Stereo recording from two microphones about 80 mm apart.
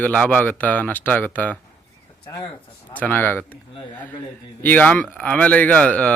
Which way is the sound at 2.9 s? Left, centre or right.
Left.